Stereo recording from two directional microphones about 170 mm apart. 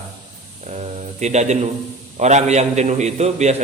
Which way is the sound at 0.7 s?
40° right (ahead or behind).